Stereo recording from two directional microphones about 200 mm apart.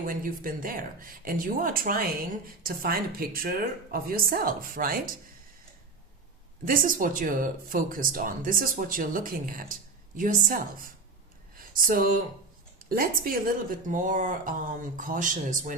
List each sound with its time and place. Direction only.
0.0 s speech: 45° right (ahead or behind)
6.7 s speech: 45° right (ahead or behind)
11.5 s a sound: 45° right (ahead or behind)
12.9 s speech: 45° right (ahead or behind)